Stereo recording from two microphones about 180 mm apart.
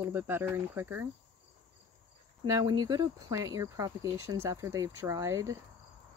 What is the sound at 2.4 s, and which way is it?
Speech, 20° right (ahead or behind).